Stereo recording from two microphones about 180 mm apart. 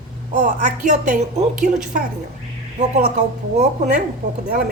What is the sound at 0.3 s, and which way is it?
A woman's voice, 45° right (ahead or behind).